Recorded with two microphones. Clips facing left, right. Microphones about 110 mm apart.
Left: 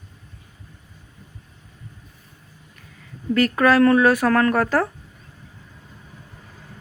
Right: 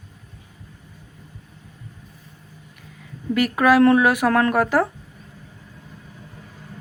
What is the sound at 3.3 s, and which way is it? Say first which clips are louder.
Speech: even; 10° right (ahead or behind).